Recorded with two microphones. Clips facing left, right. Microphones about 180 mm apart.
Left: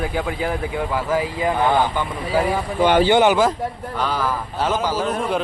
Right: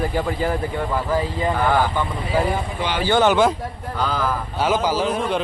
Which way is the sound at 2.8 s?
45° left (ahead or behind).